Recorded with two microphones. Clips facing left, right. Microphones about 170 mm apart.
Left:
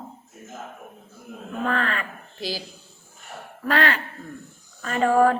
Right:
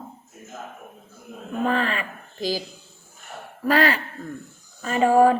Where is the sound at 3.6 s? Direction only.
5° right (ahead or behind).